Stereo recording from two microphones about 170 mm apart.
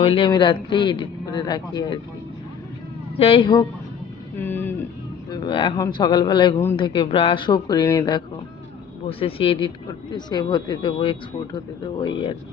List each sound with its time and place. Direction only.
0.0 s speech: 30° left (ahead or behind)
3.2 s speech: 35° left (ahead or behind)
4.4 s speech: 10° left (ahead or behind)
5.3 s speech: 25° left (ahead or behind)